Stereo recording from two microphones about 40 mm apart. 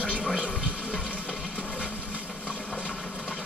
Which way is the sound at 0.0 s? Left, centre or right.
Right.